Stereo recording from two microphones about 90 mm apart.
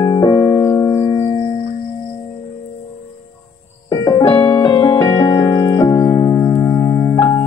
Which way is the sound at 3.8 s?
45° left (ahead or behind).